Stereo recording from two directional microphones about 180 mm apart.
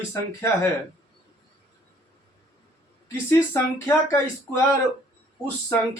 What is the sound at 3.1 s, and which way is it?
Speech, 15° left (ahead or behind).